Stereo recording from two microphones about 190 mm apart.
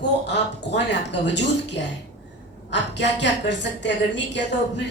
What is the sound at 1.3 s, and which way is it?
A woman's voice, 65° left (ahead or behind).